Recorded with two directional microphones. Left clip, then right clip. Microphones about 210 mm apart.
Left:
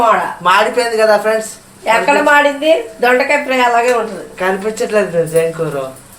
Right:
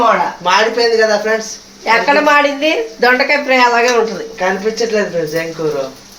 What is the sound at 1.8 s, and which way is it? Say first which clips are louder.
Speech: even; 5° right (ahead or behind).